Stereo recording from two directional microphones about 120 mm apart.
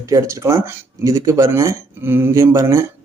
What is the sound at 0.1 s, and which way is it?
A man's voice, 25° right (ahead or behind).